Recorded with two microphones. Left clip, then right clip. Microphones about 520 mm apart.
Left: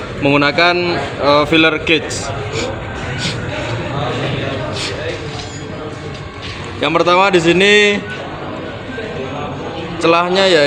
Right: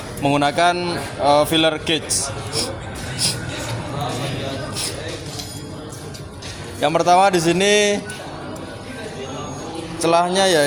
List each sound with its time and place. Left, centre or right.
0.2 s a man's voice: right
6.7 s a man's voice: right
10.0 s a man's voice: right